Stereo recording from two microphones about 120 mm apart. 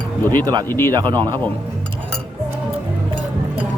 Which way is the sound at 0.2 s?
20° left (ahead or behind).